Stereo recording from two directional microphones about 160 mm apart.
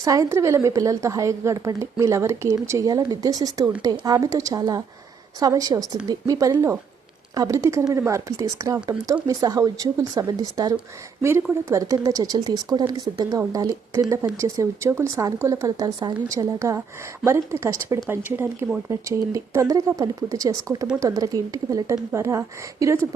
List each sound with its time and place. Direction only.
0.0 s a woman's voice: 20° right (ahead or behind)